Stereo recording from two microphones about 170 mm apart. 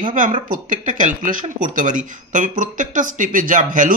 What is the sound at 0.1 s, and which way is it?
Speech, 50° right (ahead or behind).